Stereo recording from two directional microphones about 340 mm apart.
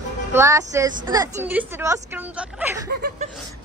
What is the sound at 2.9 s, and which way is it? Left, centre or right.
Speech, right.